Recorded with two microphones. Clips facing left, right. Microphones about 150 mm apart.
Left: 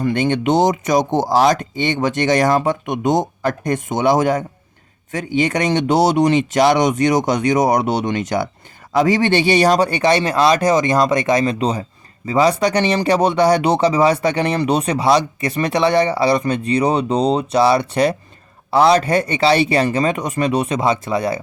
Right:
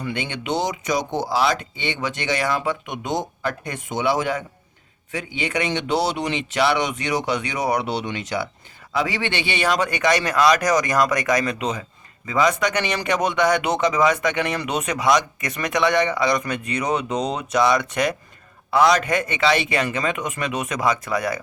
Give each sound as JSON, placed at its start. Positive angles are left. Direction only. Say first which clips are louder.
{"t": 0.0, "sound": "speech", "louder": "left 11 dB", "side_deg": 45}